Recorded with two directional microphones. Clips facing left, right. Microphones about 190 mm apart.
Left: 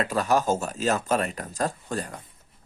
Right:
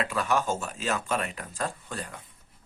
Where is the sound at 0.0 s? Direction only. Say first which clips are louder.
Left 4 dB; 40° left (ahead or behind).